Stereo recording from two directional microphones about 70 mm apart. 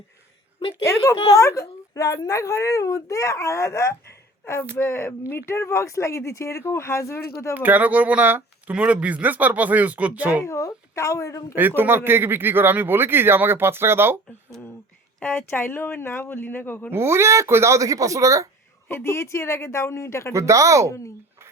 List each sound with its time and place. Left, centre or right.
0.9 s speech: left
7.5 s speech: right
10.4 s speech: left
11.8 s speech: right
15.2 s speech: left
16.9 s speech: right
18.9 s speech: left
20.3 s speech: right